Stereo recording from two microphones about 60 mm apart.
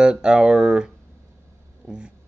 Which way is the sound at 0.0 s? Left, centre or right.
Centre.